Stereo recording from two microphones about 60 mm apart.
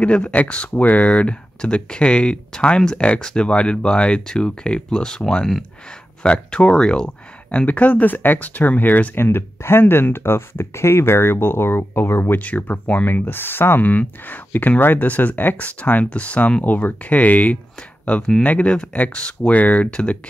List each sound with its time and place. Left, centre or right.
0.0 s speech: left
7.5 s speech: left
12.4 s speech: left